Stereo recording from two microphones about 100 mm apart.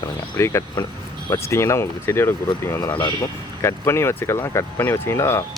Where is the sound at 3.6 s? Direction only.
25° left (ahead or behind).